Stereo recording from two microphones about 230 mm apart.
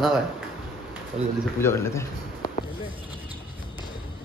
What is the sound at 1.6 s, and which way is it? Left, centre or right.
Speech, centre.